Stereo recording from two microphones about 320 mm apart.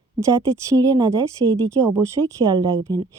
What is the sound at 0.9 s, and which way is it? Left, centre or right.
Speech, centre.